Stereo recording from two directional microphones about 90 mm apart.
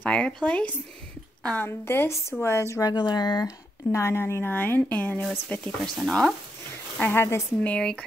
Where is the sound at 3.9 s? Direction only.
30° left (ahead or behind).